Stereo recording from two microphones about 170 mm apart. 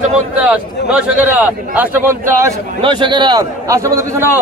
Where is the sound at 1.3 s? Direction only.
10° right (ahead or behind).